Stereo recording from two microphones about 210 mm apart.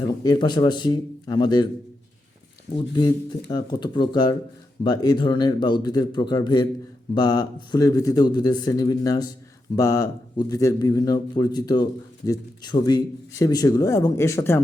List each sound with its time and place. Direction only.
0.2 s a man's voice: 20° left (ahead or behind)
2.7 s a man's voice: 20° left (ahead or behind)